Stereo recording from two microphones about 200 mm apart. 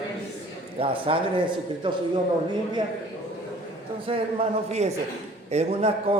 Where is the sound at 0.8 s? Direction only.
25° right (ahead or behind).